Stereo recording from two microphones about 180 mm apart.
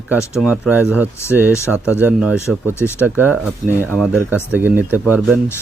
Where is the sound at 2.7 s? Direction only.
15° left (ahead or behind).